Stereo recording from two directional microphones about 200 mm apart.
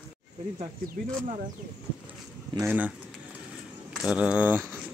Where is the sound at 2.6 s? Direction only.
10° right (ahead or behind).